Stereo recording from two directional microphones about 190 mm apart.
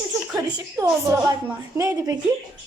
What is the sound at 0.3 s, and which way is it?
A woman's voice, 20° right (ahead or behind).